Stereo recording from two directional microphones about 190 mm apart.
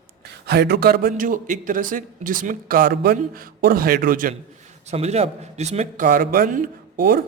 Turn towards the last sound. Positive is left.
turn(degrees=-50)  # may be behind; listen again after turning